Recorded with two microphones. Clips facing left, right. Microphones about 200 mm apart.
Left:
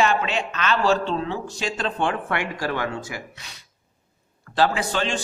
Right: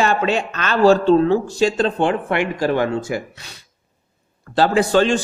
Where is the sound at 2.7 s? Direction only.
35° right (ahead or behind).